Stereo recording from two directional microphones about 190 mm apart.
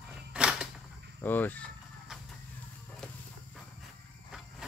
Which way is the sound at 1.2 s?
10° left (ahead or behind).